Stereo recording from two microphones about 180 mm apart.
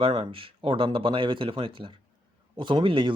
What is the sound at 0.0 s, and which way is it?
Speech, 30° right (ahead or behind).